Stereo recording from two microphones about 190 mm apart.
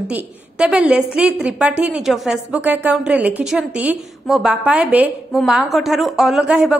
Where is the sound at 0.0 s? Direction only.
5° right (ahead or behind).